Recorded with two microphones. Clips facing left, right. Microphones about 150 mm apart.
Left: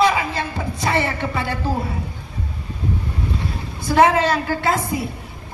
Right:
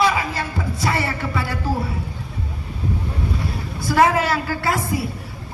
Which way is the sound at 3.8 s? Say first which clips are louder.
Left 2 dB; 20° left (ahead or behind).